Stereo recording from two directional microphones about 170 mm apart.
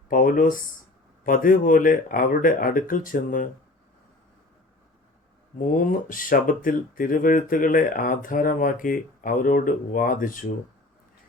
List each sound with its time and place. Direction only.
0.1 s speech: 55° left (ahead or behind)
5.5 s speech: 50° left (ahead or behind)